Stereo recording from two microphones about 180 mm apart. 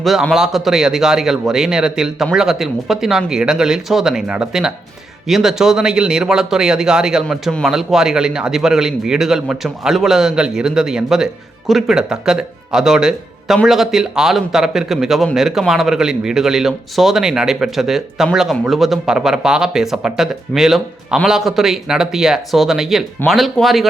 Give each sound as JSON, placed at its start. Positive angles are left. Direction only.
{"t": 0.0, "sound": "a man's voice", "side_deg": 0}